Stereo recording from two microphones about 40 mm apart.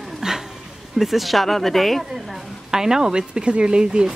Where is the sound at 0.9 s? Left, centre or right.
Centre.